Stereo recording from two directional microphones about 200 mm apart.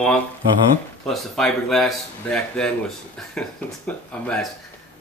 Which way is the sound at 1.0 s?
Centre (ahead or behind).